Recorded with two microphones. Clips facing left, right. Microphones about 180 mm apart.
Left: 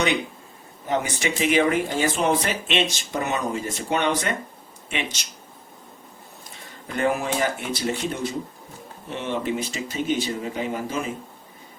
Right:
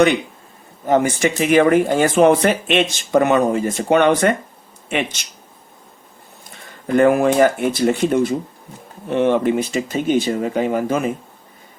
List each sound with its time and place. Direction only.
0.9 s speech: 50° right (ahead or behind)
6.8 s speech: 55° right (ahead or behind)